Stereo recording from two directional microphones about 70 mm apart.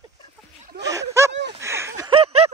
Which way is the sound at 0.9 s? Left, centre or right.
Right.